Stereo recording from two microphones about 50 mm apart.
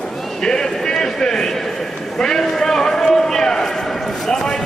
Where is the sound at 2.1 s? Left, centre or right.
Centre.